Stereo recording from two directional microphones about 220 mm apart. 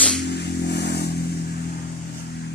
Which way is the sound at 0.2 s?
50° left (ahead or behind).